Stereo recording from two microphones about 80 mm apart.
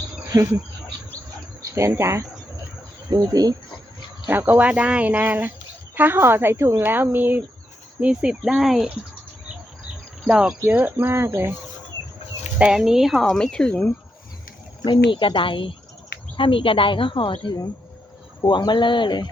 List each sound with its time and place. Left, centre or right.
0.3 s speech: right
2.0 s speech: right
3.1 s speech: right
4.3 s speech: right
8.0 s speech: centre
10.2 s speech: centre
10.7 s speech: right
12.5 s speech: centre
13.5 s speech: centre
14.8 s a woman's voice: left
18.4 s speech: left